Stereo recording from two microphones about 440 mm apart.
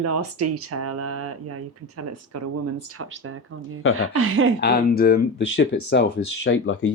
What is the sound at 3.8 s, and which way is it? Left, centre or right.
Speech, left.